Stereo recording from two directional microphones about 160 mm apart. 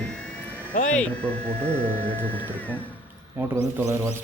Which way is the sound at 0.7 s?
50° left (ahead or behind).